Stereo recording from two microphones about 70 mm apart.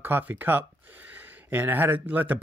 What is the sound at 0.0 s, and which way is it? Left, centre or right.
Speech, right.